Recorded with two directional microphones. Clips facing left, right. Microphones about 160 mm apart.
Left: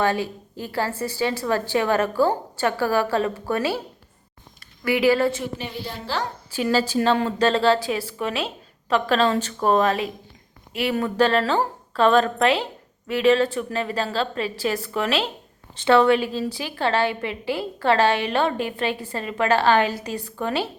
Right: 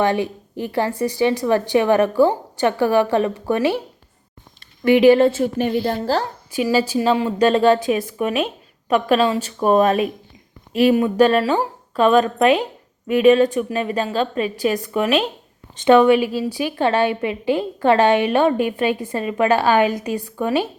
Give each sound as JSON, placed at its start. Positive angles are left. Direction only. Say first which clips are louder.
{"t": 0.0, "sound": "a woman's voice", "louder": "right 4 dB", "side_deg": -20}
{"t": 4.8, "sound": "speech", "louder": "right 7 dB", "side_deg": -20}
{"t": 5.4, "sound": "a woman's voice", "louder": "right 11 dB", "side_deg": -50}
{"t": 6.5, "sound": "a woman's voice", "louder": "right 3 dB", "side_deg": -10}
{"t": 10.9, "sound": "a woman's voice", "louder": "right 5 dB", "side_deg": -15}